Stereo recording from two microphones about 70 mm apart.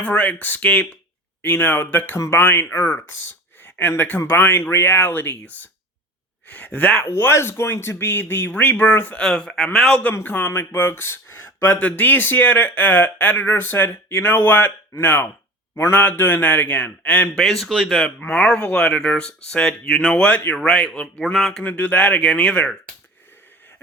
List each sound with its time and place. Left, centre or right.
0.0 s speech: left
7.0 s speech: left
9.1 s speech: centre
10.2 s speech: left
11.7 s speech: left
17.3 s speech: centre
21.3 s speech: centre
21.6 s speech: left